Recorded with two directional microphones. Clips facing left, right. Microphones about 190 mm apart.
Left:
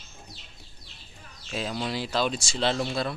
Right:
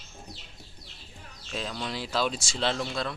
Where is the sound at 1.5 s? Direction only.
5° left (ahead or behind).